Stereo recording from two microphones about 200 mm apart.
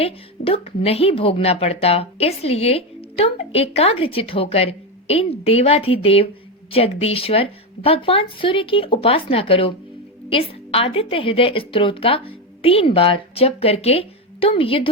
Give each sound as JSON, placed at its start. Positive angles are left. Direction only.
{"t": 0.0, "sound": "a woman's voice", "side_deg": 30}